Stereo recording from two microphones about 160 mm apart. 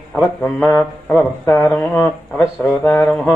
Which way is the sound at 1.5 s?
15° left (ahead or behind).